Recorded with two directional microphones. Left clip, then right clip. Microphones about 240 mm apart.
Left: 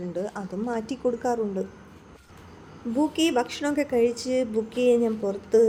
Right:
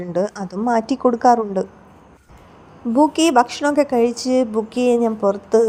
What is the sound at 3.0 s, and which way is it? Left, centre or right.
A woman's voice, centre.